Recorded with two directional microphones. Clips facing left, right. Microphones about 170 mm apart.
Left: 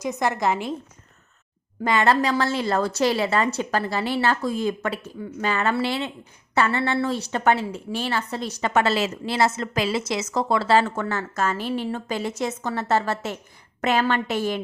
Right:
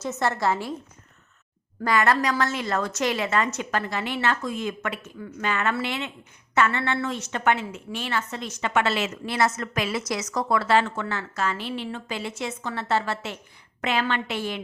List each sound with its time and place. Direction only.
0.0 s a woman's voice: 15° left (ahead or behind)
1.8 s a woman's voice: 25° left (ahead or behind); by 14.6 s 45° left (ahead or behind)